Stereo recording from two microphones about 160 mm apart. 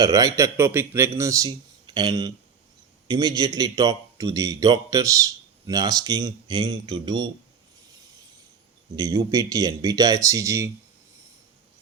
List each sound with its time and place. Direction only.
0.0 s speech: 20° right (ahead or behind)
9.0 s speech: 25° right (ahead or behind)